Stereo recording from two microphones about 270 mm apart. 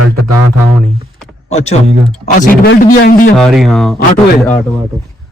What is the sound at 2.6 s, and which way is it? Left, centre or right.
Speech, left.